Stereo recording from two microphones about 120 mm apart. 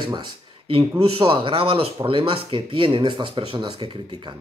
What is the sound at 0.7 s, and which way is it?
Speech, 50° right (ahead or behind).